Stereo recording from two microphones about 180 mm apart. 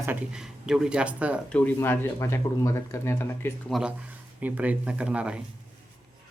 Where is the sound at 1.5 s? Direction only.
10° left (ahead or behind).